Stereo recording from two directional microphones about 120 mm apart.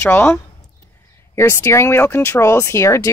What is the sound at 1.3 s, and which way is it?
Speech, 25° left (ahead or behind).